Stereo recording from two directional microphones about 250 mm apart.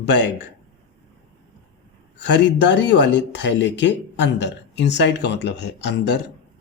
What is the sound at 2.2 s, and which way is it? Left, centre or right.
Speech, left.